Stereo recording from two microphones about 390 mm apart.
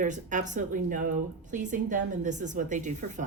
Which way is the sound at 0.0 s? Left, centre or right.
Centre.